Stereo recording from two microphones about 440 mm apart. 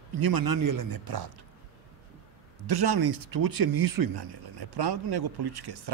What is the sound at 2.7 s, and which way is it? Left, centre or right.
Speech, right.